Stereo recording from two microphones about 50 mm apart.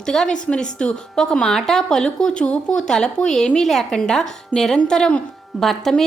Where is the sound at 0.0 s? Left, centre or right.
Centre.